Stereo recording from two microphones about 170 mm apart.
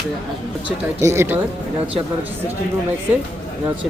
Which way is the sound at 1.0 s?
15° right (ahead or behind).